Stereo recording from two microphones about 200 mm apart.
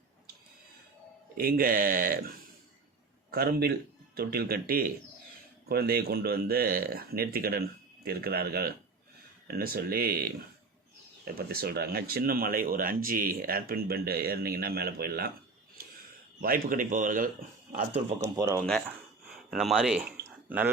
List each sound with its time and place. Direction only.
1.4 s speech: 45° right (ahead or behind)
3.3 s speech: 50° right (ahead or behind)
16.4 s speech: 45° right (ahead or behind)
18.3 s speech: 15° right (ahead or behind)
19.5 s speech: centre (ahead or behind)